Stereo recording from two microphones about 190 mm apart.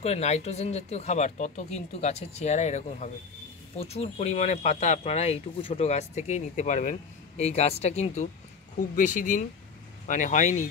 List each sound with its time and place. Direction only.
0.0 s speech: 35° left (ahead or behind)